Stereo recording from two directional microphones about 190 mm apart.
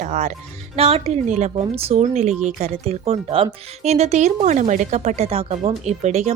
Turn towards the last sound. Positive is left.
turn(degrees=-35)  # may be behind; listen again after turning